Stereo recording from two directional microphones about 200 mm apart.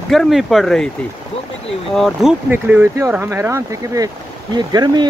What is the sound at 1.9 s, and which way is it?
Speech, centre (ahead or behind).